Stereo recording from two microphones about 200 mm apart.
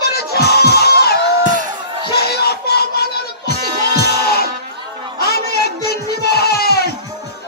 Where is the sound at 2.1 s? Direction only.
50° left (ahead or behind).